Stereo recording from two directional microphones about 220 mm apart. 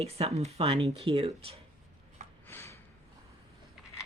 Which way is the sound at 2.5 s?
10° left (ahead or behind).